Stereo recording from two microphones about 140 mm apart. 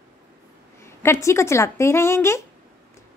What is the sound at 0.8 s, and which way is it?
A woman's voice, 20° left (ahead or behind).